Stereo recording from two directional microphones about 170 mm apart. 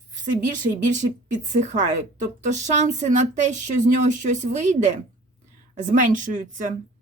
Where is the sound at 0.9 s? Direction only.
45° right (ahead or behind).